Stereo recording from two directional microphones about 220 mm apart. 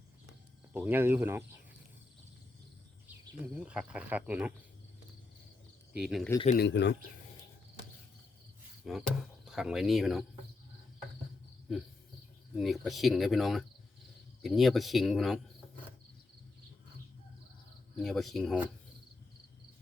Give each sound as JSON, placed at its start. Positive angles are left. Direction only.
{"t": 0.7, "sound": "speech", "side_deg": -10}
{"t": 3.5, "sound": "speech", "side_deg": -5}
{"t": 6.0, "sound": "speech", "side_deg": -5}
{"t": 6.6, "sound": "speech", "side_deg": 50}
{"t": 8.8, "sound": "speech", "side_deg": 0}
{"t": 12.5, "sound": "speech", "side_deg": 0}
{"t": 18.0, "sound": "speech", "side_deg": 0}